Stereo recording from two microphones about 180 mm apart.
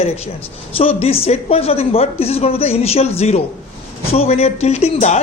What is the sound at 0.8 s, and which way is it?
A woman's voice, 35° left (ahead or behind).